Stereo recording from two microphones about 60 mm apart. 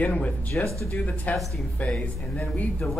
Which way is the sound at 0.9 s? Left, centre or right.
Left.